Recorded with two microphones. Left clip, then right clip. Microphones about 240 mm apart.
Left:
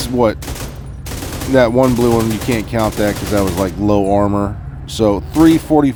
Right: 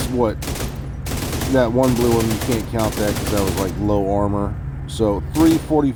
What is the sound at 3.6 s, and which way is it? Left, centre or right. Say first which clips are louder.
Speech: left 5 dB; left.